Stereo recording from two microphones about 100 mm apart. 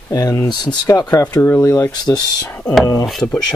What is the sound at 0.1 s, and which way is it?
Speech, 35° left (ahead or behind).